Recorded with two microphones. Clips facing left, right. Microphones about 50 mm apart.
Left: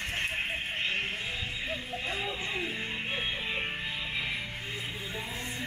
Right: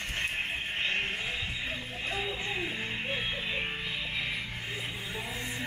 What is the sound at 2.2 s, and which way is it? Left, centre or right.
Music, centre.